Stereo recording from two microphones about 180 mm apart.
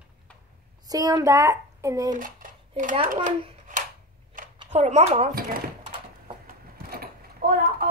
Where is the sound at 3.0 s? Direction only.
50° right (ahead or behind).